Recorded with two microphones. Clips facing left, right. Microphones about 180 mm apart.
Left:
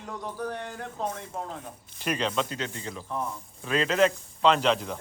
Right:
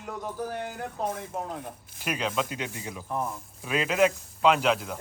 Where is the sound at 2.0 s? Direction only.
5° right (ahead or behind).